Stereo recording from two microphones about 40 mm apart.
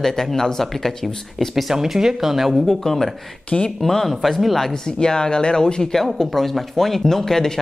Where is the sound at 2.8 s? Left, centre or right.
Centre.